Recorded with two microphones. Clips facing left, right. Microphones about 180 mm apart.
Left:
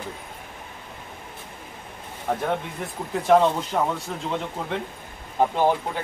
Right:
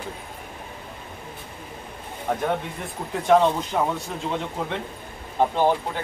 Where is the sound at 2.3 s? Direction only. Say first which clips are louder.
Even; centre (ahead or behind).